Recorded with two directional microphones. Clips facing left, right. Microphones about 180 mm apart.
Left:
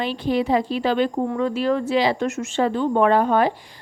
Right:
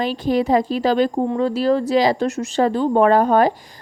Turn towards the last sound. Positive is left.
turn(degrees=-40)  # may be behind; listen again after turning